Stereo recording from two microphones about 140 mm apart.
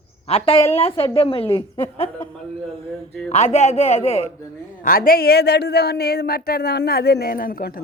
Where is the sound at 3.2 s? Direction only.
50° left (ahead or behind).